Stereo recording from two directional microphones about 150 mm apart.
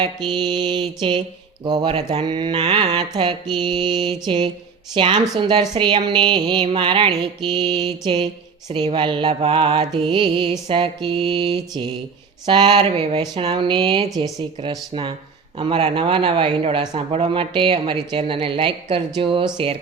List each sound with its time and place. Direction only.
0.0 s mantra: 30° right (ahead or behind)
1.6 s a woman's voice: 35° right (ahead or behind)
2.6 s mantra: 45° right (ahead or behind)
3.2 s mantra: 30° right (ahead or behind)
4.9 s a woman's voice: 35° right (ahead or behind)